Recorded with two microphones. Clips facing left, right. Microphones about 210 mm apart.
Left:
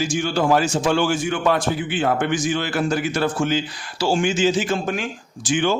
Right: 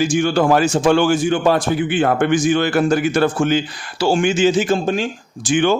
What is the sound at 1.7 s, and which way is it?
A man's voice, 55° right (ahead or behind).